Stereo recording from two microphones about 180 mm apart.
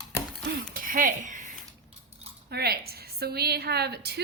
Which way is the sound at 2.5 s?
60° right (ahead or behind).